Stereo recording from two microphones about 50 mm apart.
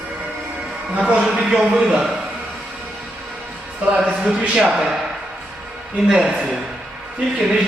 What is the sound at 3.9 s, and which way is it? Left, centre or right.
Speech, centre.